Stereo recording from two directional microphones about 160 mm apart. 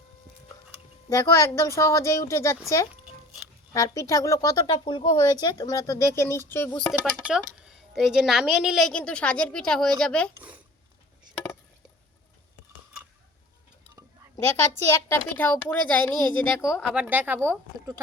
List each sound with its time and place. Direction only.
1.1 s speech: 20° left (ahead or behind)
3.7 s speech: 20° left (ahead or behind)
6.8 s a woman's voice: 5° left (ahead or behind)
14.8 s a woman's voice: 15° left (ahead or behind)
16.8 s a woman's voice: 10° right (ahead or behind)